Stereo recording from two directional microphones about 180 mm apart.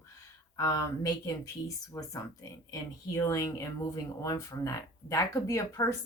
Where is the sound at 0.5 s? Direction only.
20° left (ahead or behind).